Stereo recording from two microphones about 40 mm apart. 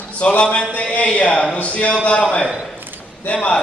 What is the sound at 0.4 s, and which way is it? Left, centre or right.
A man's voice, left.